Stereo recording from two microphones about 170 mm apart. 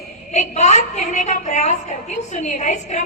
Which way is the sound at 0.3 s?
45° left (ahead or behind).